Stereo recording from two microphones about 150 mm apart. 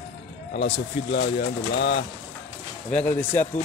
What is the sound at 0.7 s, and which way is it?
Speech, 90° left.